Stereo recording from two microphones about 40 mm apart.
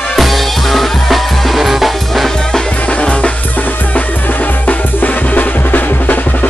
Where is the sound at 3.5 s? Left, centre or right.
Left.